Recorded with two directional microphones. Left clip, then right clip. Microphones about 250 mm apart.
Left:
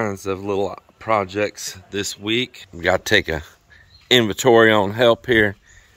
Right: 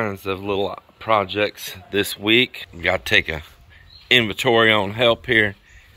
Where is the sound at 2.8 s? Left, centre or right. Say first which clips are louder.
Left 1 dB; left.